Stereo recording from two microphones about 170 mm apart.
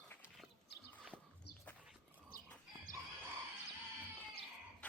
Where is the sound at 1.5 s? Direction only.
75° left (ahead or behind).